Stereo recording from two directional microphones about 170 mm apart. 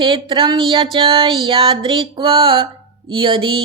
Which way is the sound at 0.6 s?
30° right (ahead or behind).